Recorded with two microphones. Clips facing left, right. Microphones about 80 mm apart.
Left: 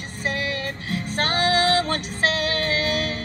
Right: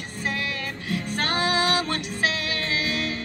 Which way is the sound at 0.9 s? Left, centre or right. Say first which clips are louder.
Left 1 dB; left.